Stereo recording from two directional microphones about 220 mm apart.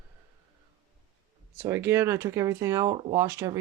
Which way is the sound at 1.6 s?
10° right (ahead or behind).